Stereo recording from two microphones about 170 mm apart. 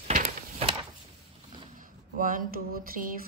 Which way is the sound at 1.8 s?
55° right (ahead or behind).